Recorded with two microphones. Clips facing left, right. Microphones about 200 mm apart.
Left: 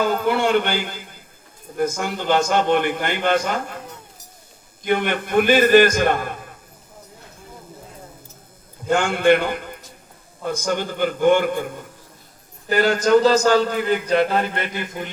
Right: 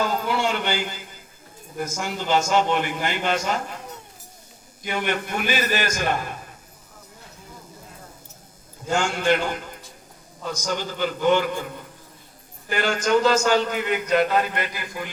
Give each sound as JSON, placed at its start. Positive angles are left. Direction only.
{"t": 0.0, "sound": "a sound", "side_deg": 55}
{"t": 1.7, "sound": "a man's voice", "side_deg": 55}
{"t": 4.9, "sound": "a man's voice", "side_deg": 55}
{"t": 8.9, "sound": "a man's voice", "side_deg": 55}
{"t": 12.6, "sound": "a man's voice", "side_deg": 40}